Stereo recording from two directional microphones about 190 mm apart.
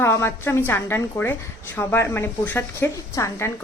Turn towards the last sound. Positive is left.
turn(degrees=15)  # may be behind; listen again after turning